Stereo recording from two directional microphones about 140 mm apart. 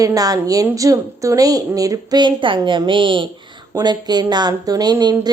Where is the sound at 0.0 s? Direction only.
25° right (ahead or behind).